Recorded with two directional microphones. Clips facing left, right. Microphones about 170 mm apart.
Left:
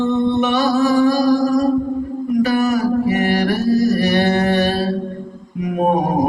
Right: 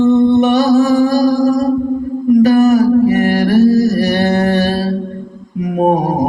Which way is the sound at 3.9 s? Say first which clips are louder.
Right 2 dB; 40° right (ahead or behind).